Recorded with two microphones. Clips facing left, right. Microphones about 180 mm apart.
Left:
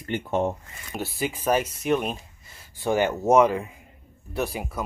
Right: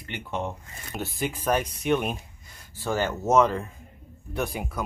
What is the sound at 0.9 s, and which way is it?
Speech, 5° left (ahead or behind).